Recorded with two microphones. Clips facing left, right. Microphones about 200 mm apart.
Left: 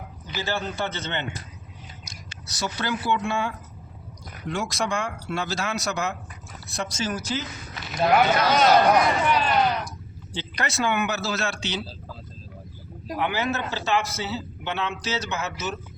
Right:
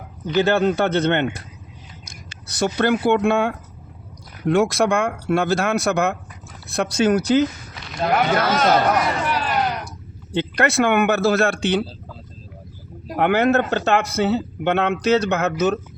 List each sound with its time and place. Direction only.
0.3 s a man's voice: 60° right (ahead or behind)
7.9 s speech: 5° left (ahead or behind)
9.2 s a sound: 5° right (ahead or behind)
10.3 s a man's voice: 60° right (ahead or behind)
13.1 s a man's voice: 60° right (ahead or behind)